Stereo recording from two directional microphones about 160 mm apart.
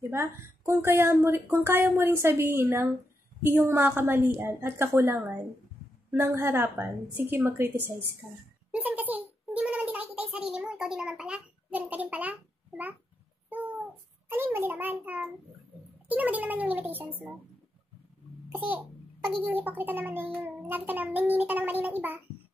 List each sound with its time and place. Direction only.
0.1 s a woman's voice: 15° right (ahead or behind)
8.7 s a sound: 10° right (ahead or behind)
10.3 s a child's voice: 5° right (ahead or behind)
13.5 s cat: 10° right (ahead or behind)
14.3 s a woman's voice: 15° right (ahead or behind)
19.2 s a woman's voice: 10° right (ahead or behind)